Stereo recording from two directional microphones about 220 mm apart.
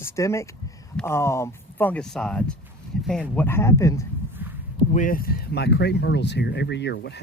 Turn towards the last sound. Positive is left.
turn(degrees=50)  # may be behind; listen again after turning